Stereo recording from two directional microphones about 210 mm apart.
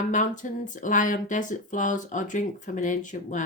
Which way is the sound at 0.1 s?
35° left (ahead or behind).